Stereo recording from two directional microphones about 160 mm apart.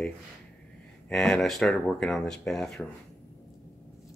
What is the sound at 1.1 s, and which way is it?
Speech, 5° left (ahead or behind).